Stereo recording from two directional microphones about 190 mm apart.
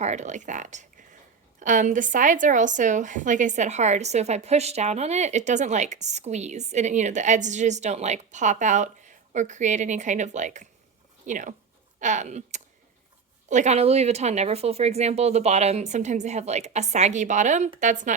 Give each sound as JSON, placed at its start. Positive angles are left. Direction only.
{"t": 0.0, "sound": "a woman's voice", "side_deg": -35}